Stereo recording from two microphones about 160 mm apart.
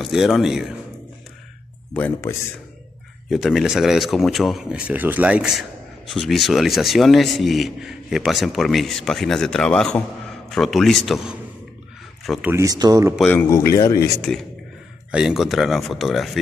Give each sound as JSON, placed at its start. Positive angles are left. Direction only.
{"t": 0.0, "sound": "speech", "side_deg": 0}
{"t": 2.0, "sound": "speech", "side_deg": 10}
{"t": 3.3, "sound": "speech", "side_deg": 0}
{"t": 12.5, "sound": "speech", "side_deg": -25}
{"t": 13.3, "sound": "speech", "side_deg": 15}
{"t": 14.3, "sound": "speech", "side_deg": 5}
{"t": 15.0, "sound": "speech", "side_deg": -5}